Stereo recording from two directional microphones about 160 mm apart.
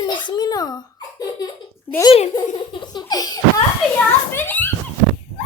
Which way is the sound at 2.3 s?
25° left (ahead or behind).